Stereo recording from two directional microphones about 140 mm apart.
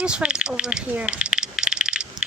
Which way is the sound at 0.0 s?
5° right (ahead or behind).